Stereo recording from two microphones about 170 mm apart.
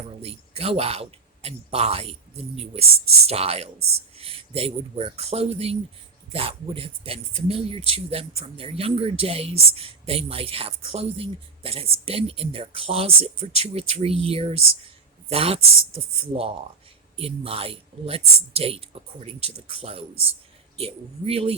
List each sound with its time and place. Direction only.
0.2 s speech: 35° right (ahead or behind)
17.2 s speech: 35° right (ahead or behind)